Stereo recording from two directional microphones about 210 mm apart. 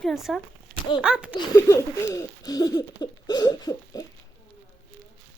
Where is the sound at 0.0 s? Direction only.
Centre (ahead or behind).